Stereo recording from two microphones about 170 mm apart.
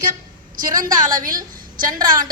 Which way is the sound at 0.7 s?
50° right (ahead or behind).